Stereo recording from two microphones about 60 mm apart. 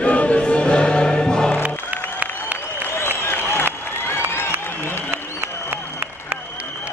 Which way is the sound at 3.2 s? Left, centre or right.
Left.